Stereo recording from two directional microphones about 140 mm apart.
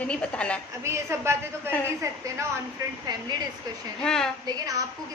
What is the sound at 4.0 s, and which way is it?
Speech, 5° left (ahead or behind).